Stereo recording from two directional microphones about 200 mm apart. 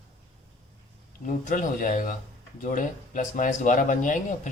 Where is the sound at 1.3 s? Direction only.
40° left (ahead or behind).